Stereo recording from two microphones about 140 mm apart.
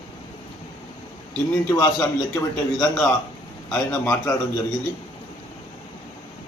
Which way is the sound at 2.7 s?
5° left (ahead or behind).